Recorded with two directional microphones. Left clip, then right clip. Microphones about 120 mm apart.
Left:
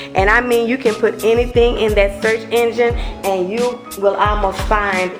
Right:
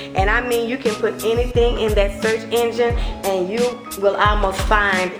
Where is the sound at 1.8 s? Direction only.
Centre (ahead or behind).